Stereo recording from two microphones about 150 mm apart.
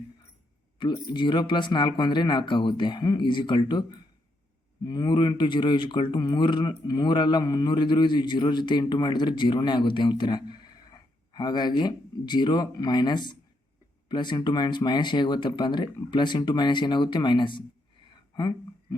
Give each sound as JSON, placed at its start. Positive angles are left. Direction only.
{"t": 0.8, "sound": "speech", "side_deg": 30}
{"t": 4.9, "sound": "speech", "side_deg": 30}
{"t": 18.3, "sound": "a sound", "side_deg": 30}